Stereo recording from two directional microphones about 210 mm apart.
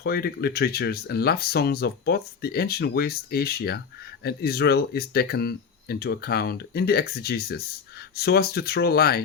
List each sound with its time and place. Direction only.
0.0 s speech: 50° left (ahead or behind)